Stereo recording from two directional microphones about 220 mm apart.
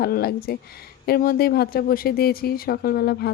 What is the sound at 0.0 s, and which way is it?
Speech, 45° left (ahead or behind).